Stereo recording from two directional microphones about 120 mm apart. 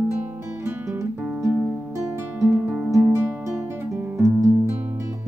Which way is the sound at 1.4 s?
20° right (ahead or behind).